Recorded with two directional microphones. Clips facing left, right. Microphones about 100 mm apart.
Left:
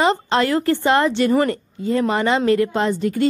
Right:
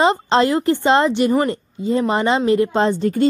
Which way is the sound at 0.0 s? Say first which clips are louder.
Right 2 dB; 20° right (ahead or behind).